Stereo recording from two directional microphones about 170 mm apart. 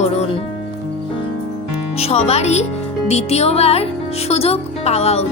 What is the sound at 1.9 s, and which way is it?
Music, 35° left (ahead or behind).